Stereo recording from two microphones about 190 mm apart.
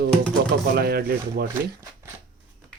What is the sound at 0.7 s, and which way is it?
Speech, 55° right (ahead or behind).